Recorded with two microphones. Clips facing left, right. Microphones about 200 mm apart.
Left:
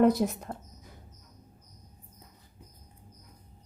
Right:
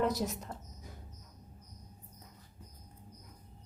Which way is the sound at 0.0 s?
55° left (ahead or behind).